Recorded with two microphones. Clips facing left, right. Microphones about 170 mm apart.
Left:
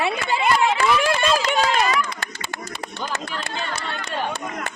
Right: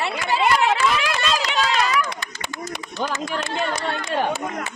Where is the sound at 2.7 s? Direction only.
70° right (ahead or behind).